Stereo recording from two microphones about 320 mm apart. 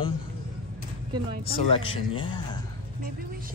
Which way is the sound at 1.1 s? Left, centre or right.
Centre.